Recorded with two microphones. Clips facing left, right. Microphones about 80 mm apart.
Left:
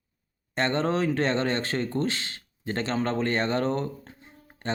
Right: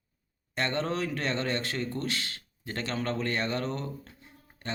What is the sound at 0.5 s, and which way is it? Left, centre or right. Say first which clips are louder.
Speech: left 5 dB; left.